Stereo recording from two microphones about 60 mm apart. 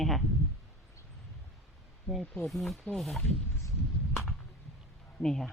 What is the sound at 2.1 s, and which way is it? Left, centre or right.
Speech, centre.